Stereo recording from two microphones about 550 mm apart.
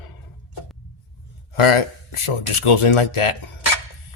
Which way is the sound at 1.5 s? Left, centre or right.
Left.